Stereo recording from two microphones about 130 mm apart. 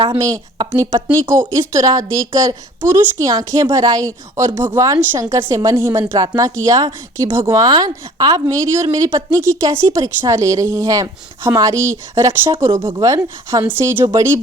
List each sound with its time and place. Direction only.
0.2 s speech: 25° right (ahead or behind)